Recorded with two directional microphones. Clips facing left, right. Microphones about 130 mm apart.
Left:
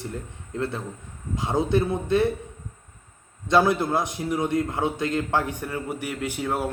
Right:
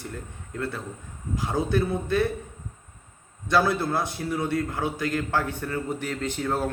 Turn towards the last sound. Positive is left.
turn(degrees=10)  # may be behind; listen again after turning